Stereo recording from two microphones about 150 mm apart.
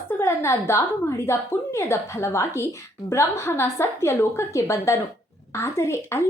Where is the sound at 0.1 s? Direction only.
15° left (ahead or behind).